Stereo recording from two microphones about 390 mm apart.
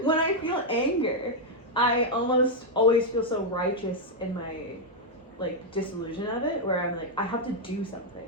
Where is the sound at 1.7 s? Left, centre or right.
Centre.